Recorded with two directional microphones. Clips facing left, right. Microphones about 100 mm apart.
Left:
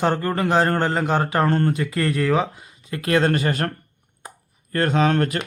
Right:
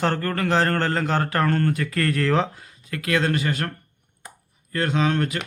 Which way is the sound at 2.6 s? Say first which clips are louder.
Left 2 dB; 20° left (ahead or behind).